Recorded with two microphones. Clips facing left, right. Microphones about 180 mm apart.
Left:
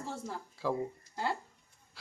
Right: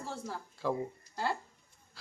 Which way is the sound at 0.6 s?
Centre (ahead or behind).